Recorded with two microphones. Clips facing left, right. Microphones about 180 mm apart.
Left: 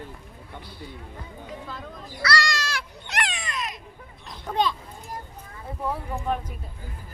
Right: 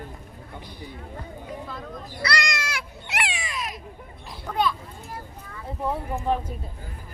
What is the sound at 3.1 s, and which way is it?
Cat, 5° right (ahead or behind).